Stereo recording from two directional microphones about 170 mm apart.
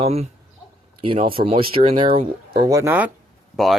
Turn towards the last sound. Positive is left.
turn(degrees=0)  # may be behind; listen again after turning